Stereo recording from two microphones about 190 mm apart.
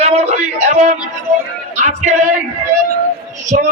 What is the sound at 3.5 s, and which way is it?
Speech, 45° right (ahead or behind).